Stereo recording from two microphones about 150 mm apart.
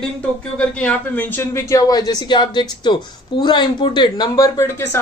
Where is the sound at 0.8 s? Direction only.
10° left (ahead or behind).